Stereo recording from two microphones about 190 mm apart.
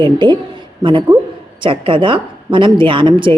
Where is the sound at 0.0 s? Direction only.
25° right (ahead or behind).